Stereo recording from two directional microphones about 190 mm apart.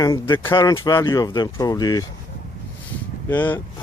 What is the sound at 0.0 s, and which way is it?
Speech, 15° left (ahead or behind).